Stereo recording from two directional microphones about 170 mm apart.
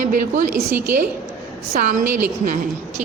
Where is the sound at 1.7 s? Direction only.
55° right (ahead or behind).